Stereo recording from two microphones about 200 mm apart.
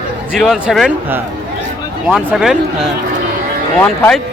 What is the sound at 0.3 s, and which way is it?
Speech, centre (ahead or behind).